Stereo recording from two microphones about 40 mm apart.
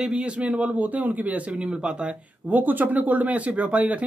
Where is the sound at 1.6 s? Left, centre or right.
Right.